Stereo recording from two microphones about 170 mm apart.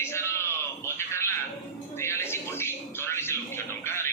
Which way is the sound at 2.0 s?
15° left (ahead or behind).